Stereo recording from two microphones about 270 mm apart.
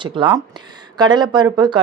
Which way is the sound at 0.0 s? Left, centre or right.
Centre.